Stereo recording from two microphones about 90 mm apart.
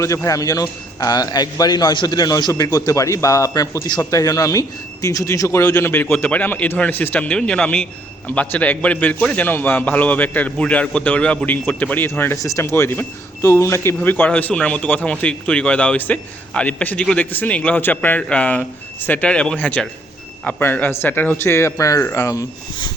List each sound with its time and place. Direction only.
0.0 s a man's voice: 35° left (ahead or behind)
2.7 s speech: 40° left (ahead or behind)
5.9 s speech: 25° left (ahead or behind)
12.4 s speech: 35° left (ahead or behind)